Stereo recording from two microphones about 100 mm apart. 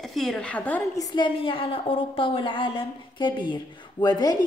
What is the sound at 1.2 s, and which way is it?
A woman's voice, 60° left (ahead or behind).